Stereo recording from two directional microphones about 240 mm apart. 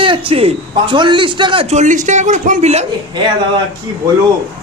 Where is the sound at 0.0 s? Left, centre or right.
Right.